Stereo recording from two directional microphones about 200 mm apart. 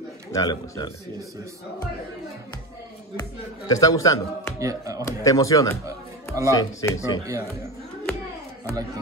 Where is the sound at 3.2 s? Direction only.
15° left (ahead or behind).